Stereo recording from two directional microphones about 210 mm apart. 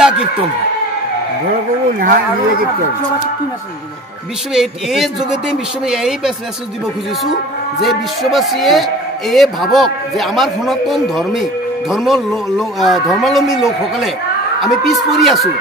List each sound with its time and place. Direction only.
2.0 s speech: 40° right (ahead or behind)
4.6 s a man's voice: centre (ahead or behind)
7.8 s a man's voice: centre (ahead or behind)
14.6 s a man's voice: centre (ahead or behind)